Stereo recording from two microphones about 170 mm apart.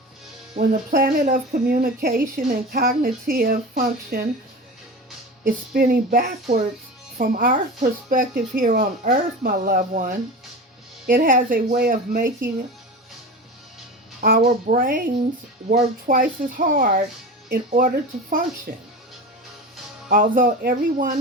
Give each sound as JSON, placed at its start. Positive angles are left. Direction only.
{"t": 0.7, "sound": "speech", "side_deg": -60}
{"t": 5.5, "sound": "speech", "side_deg": -60}
{"t": 14.2, "sound": "speech", "side_deg": -55}
{"t": 20.1, "sound": "speech", "side_deg": -55}